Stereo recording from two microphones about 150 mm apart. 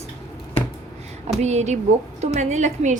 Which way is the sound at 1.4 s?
50° right (ahead or behind).